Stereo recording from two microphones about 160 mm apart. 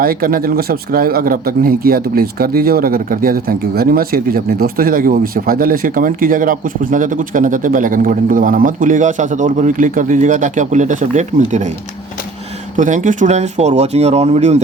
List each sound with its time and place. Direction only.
0.0 s a man's voice: 65° right (ahead or behind); by 11.7 s 50° right (ahead or behind)
12.7 s speech: 55° right (ahead or behind)